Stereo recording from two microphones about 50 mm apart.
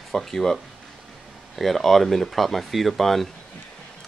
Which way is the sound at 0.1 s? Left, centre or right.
Centre.